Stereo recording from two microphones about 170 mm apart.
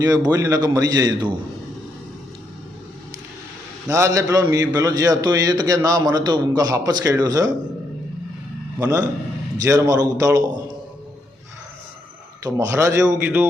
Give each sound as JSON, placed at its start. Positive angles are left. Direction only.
{"t": 0.0, "sound": "a man's voice", "side_deg": -20}
{"t": 3.8, "sound": "a man's voice", "side_deg": -20}
{"t": 8.8, "sound": "a man's voice", "side_deg": -20}
{"t": 12.4, "sound": "speech", "side_deg": -20}